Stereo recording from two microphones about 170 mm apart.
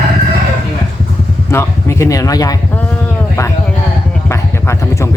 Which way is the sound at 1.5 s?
15° left (ahead or behind).